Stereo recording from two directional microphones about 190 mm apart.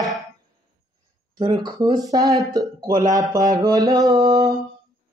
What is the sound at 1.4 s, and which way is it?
Speech, 20° right (ahead or behind).